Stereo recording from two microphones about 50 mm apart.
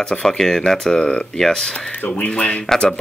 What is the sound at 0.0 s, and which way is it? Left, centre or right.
Speech, centre.